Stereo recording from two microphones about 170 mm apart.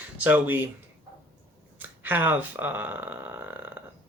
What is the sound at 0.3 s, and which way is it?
Speech, 10° right (ahead or behind).